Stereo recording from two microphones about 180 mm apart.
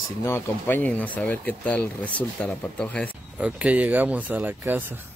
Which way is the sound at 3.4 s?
10° right (ahead or behind).